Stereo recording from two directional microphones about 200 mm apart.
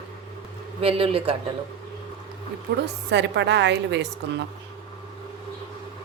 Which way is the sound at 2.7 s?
55° right (ahead or behind).